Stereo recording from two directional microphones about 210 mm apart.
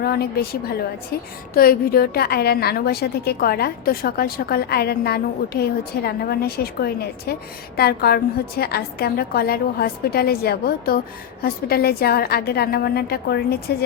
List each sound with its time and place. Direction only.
0.0 s a woman's voice: 50° left (ahead or behind)